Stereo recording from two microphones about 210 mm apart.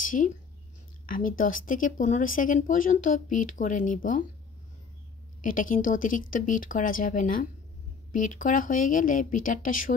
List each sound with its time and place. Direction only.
0.0 s speech: 40° left (ahead or behind)
5.4 s speech: 40° left (ahead or behind)